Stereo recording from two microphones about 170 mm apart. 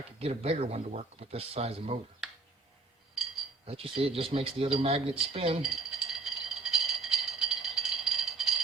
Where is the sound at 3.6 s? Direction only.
35° right (ahead or behind).